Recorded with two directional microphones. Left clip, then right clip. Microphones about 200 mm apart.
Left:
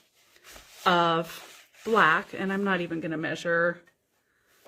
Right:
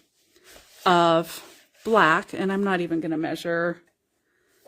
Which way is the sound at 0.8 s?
55° right (ahead or behind).